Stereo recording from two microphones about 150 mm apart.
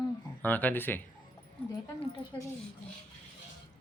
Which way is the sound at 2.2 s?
40° left (ahead or behind).